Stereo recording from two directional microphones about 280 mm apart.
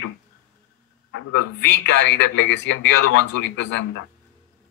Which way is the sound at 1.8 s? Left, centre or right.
Left.